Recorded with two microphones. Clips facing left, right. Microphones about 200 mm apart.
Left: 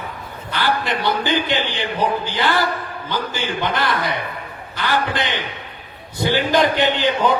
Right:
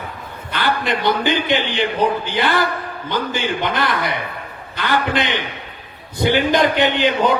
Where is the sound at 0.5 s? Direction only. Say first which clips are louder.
Right 1 dB; 20° right (ahead or behind).